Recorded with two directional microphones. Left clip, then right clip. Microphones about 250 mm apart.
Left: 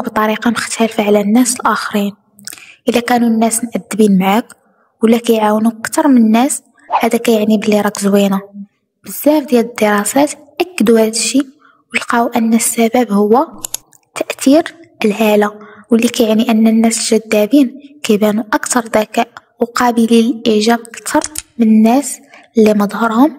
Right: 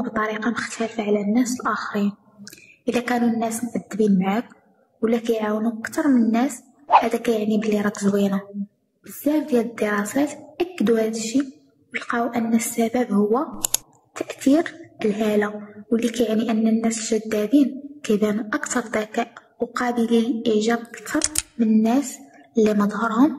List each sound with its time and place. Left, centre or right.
0.0 s a woman's voice: left
21.2 s speech: centre
21.5 s a woman's voice: left